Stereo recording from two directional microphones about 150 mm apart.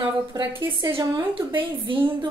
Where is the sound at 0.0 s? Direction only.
30° right (ahead or behind).